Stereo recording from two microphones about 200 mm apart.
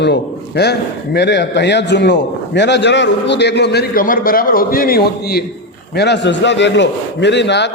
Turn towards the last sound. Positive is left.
turn(degrees=60)  # may be behind; listen again after turning